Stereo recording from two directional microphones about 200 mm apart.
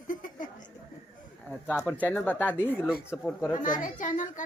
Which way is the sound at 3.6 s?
40° left (ahead or behind).